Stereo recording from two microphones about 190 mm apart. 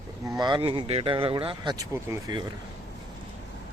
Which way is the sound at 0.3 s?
20° right (ahead or behind).